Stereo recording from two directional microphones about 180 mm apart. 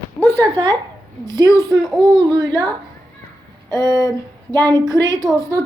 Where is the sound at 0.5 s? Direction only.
25° right (ahead or behind).